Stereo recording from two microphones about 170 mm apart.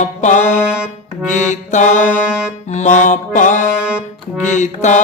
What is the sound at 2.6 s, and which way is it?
Speech, 45° left (ahead or behind).